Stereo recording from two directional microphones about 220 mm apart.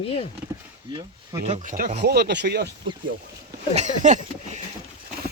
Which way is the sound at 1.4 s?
35° right (ahead or behind).